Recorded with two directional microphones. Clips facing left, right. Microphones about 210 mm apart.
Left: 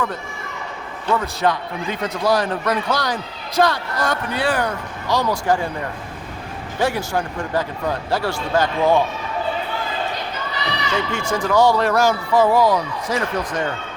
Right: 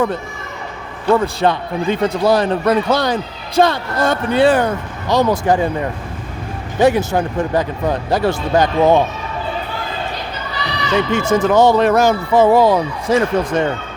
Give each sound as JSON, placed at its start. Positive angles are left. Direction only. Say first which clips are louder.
{"t": 1.1, "sound": "a man's voice", "louder": "right 5 dB", "side_deg": -30}
{"t": 6.7, "sound": "a man's voice", "louder": "right 7 dB", "side_deg": -20}
{"t": 10.9, "sound": "a man's voice", "louder": "right 9 dB", "side_deg": -20}